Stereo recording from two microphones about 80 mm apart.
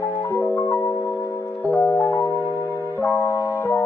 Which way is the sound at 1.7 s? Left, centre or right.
Left.